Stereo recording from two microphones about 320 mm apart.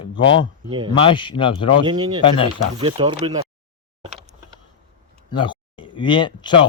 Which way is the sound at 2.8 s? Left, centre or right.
Centre.